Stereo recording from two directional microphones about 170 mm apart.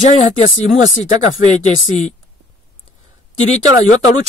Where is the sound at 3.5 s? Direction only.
40° left (ahead or behind).